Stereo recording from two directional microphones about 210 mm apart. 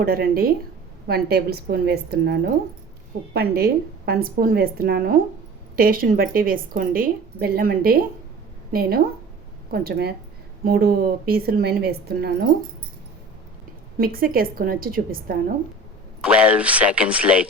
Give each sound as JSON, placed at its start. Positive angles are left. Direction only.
{"t": 0.0, "sound": "a woman's voice", "side_deg": -45}
{"t": 14.0, "sound": "a woman's voice", "side_deg": -45}
{"t": 16.2, "sound": "speech", "side_deg": -5}